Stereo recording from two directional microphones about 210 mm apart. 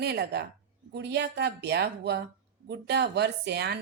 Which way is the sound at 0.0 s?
50° right (ahead or behind).